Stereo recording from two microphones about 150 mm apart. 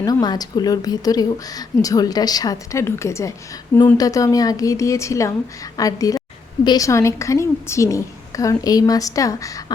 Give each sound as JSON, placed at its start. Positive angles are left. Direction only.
{"t": 0.0, "sound": "a woman's voice", "side_deg": 25}